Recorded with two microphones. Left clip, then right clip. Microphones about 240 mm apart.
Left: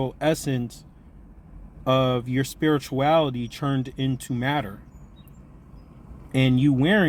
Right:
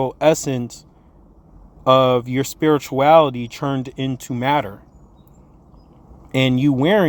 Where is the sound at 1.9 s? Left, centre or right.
Right.